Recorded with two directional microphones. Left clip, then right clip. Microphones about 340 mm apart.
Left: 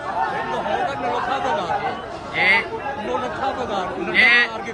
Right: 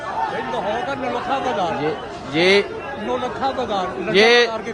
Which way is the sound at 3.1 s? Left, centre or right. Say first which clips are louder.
Right 3 dB; right.